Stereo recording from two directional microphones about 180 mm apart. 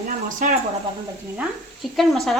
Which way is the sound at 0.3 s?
45° right (ahead or behind).